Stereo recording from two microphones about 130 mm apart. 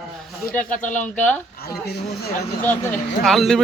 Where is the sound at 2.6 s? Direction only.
15° left (ahead or behind).